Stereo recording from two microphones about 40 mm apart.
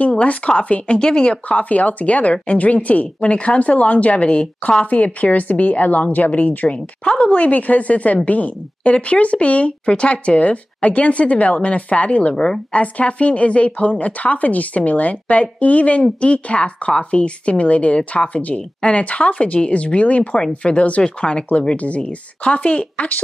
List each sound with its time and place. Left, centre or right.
0.2 s speech: left
0.9 s speech: left
1.5 s speech: left
4.8 s a woman's voice: left
6.7 s speech: left